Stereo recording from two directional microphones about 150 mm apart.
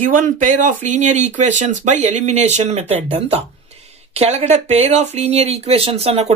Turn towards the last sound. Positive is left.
turn(degrees=-45)  # may be behind; listen again after turning